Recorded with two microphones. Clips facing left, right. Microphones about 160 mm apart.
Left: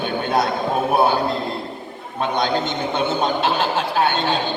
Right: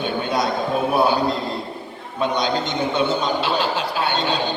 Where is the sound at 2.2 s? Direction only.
50° left (ahead or behind).